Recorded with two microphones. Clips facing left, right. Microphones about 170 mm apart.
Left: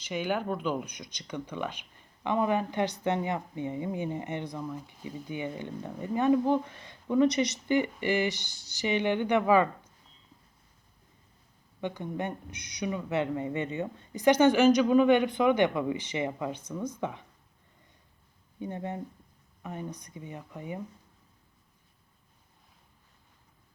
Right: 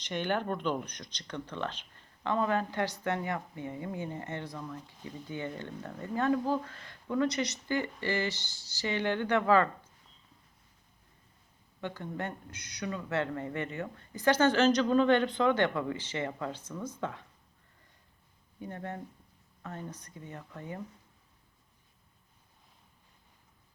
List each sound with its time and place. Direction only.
0.0 s speech: 5° left (ahead or behind)
11.8 s speech: 15° left (ahead or behind)
18.6 s speech: 20° left (ahead or behind)